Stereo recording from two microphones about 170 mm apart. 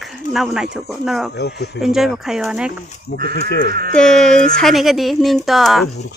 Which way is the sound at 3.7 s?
60° right (ahead or behind).